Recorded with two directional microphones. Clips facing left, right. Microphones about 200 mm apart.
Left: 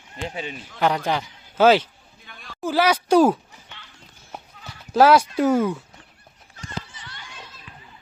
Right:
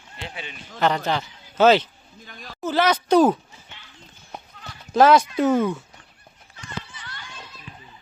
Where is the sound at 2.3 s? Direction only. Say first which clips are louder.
Right 2 dB; 40° right (ahead or behind).